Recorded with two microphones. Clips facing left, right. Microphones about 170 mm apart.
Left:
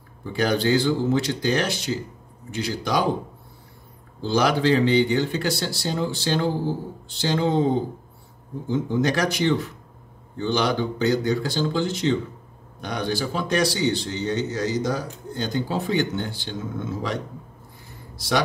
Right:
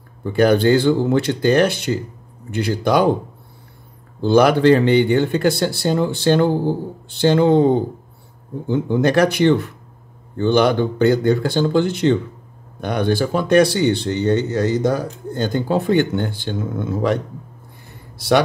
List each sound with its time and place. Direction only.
0.2 s speech: 55° right (ahead or behind)
4.2 s speech: 55° right (ahead or behind)
18.1 s a sound: 60° right (ahead or behind)